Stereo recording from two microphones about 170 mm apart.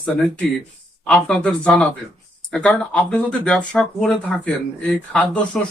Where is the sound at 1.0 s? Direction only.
5° left (ahead or behind).